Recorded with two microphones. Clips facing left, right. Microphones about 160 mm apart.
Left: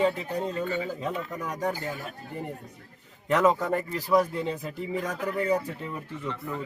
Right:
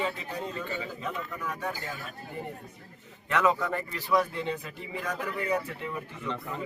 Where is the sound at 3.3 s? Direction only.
40° left (ahead or behind).